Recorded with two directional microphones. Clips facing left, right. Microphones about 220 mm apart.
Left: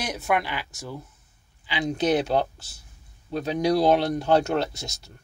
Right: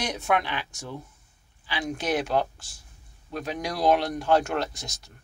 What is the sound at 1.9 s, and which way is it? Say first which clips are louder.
Speech: left 5 dB; 30° left (ahead or behind).